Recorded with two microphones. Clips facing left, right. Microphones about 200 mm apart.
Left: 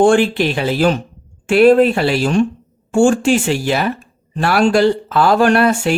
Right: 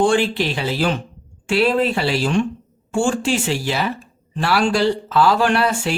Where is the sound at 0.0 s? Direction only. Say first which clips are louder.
Left 5 dB; 50° left (ahead or behind).